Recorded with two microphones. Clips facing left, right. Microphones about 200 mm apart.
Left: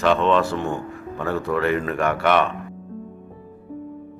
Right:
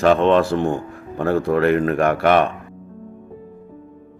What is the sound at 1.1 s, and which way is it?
A man's voice, 50° right (ahead or behind).